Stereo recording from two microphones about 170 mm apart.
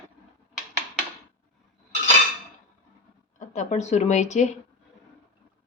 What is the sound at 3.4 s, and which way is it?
A woman's voice, 45° left (ahead or behind).